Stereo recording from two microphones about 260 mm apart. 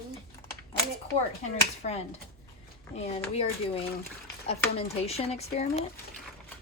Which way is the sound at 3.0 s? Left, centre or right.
Left.